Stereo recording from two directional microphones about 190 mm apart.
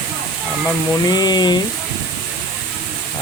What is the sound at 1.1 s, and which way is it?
Speech, 20° left (ahead or behind).